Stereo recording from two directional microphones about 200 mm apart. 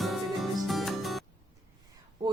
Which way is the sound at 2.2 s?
20° right (ahead or behind).